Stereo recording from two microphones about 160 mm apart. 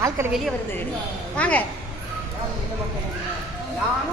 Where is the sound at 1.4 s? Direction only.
10° left (ahead or behind).